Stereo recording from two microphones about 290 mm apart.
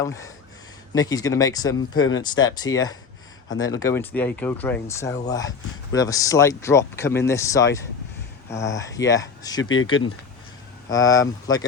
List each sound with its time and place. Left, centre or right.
0.0 s speech: centre